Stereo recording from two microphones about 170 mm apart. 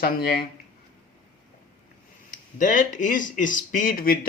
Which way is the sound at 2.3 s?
50° left (ahead or behind).